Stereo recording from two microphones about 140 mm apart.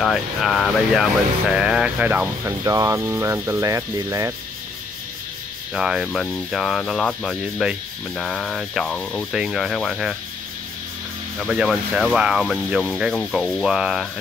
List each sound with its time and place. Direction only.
0.0 s speech: centre (ahead or behind)
2.6 s speech: 25° right (ahead or behind)
5.8 s speech: 5° right (ahead or behind)
11.5 s speech: 5° right (ahead or behind)